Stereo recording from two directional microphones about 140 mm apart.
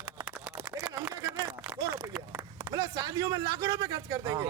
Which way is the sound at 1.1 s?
25° right (ahead or behind).